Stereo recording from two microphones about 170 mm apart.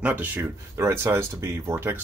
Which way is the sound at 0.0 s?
10° right (ahead or behind).